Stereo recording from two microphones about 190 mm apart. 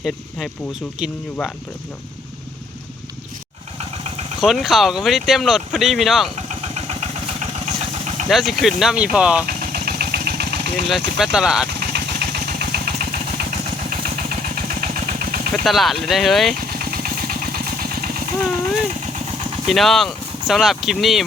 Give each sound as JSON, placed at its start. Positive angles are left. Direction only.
{"t": 0.0, "sound": "speech", "side_deg": 0}
{"t": 3.8, "sound": "vehicle", "side_deg": -35}
{"t": 4.4, "sound": "speech", "side_deg": 0}
{"t": 6.3, "sound": "vehicle", "side_deg": -35}
{"t": 8.3, "sound": "speech", "side_deg": 0}
{"t": 9.5, "sound": "vehicle", "side_deg": -50}
{"t": 10.8, "sound": "speech", "side_deg": 0}
{"t": 11.8, "sound": "vehicle", "side_deg": -60}
{"t": 15.5, "sound": "speech", "side_deg": 0}
{"t": 16.6, "sound": "vehicle", "side_deg": -50}
{"t": 19.6, "sound": "speech", "side_deg": 0}